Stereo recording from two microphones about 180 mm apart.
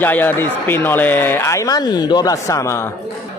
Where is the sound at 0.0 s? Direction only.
10° left (ahead or behind).